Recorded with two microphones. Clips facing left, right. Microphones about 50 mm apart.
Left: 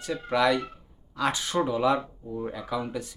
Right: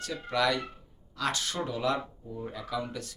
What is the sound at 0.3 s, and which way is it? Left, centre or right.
Speech, centre.